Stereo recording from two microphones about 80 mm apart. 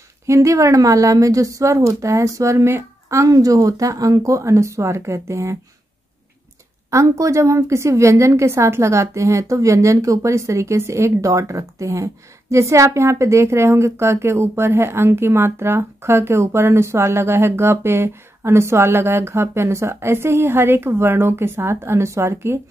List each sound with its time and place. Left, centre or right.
0.3 s a woman's voice: right
6.9 s a woman's voice: right